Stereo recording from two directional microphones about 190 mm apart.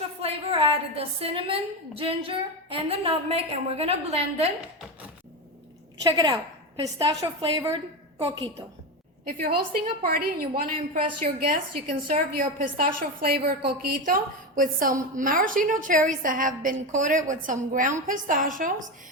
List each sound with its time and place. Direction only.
0.2 s a woman's voice: 30° right (ahead or behind)
6.0 s a woman's voice: 20° right (ahead or behind)
9.2 s a woman's voice: 50° right (ahead or behind)